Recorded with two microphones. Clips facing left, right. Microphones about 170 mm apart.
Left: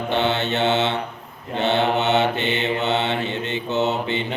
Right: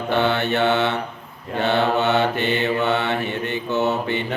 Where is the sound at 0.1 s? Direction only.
20° left (ahead or behind).